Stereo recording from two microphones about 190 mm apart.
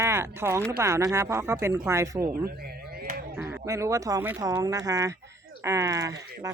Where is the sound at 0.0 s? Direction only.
15° right (ahead or behind).